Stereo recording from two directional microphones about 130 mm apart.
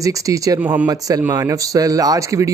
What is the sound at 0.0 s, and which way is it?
Speech, 25° right (ahead or behind).